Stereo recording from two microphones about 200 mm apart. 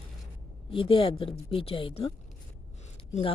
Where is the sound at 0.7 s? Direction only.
25° left (ahead or behind).